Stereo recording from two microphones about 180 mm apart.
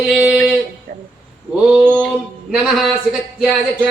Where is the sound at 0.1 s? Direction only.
Centre (ahead or behind).